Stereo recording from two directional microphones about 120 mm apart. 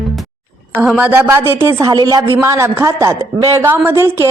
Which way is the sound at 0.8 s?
10° right (ahead or behind).